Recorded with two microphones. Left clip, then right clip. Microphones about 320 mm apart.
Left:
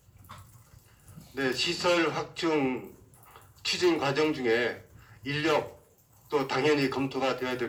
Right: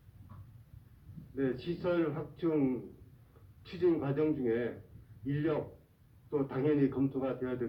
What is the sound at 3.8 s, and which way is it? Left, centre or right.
A man's voice, centre.